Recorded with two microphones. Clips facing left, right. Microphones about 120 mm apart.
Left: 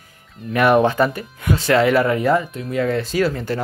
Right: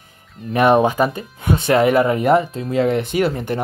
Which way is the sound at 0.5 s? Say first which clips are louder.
Right 1 dB; 25° right (ahead or behind).